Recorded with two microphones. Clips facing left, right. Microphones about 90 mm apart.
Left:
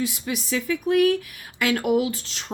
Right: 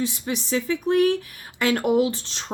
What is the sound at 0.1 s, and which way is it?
A woman's voice, 30° right (ahead or behind).